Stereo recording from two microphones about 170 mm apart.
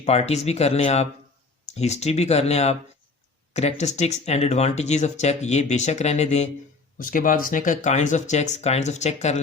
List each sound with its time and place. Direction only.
0.0 s speech: 40° left (ahead or behind)
7.0 s speech: 50° left (ahead or behind)